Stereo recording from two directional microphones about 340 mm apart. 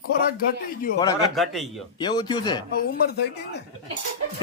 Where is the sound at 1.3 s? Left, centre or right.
Centre.